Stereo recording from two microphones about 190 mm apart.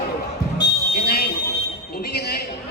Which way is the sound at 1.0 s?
55° left (ahead or behind).